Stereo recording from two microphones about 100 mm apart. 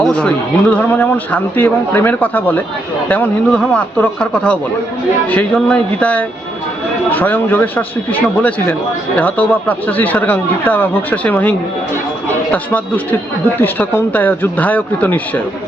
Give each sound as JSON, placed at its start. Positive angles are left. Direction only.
{"t": 0.0, "sound": "speech", "side_deg": 10}
{"t": 5.5, "sound": "speech", "side_deg": 10}